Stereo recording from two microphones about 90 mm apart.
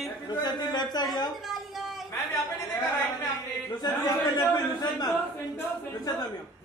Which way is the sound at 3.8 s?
50° left (ahead or behind).